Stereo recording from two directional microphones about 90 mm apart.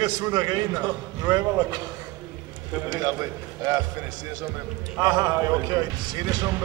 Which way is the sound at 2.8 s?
50° right (ahead or behind).